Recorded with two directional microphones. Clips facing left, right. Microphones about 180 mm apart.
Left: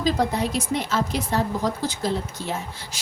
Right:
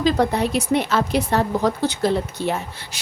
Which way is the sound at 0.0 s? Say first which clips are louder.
Right 4 dB; 65° right (ahead or behind).